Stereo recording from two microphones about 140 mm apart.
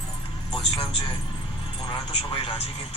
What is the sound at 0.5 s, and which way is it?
A man's voice, 35° left (ahead or behind).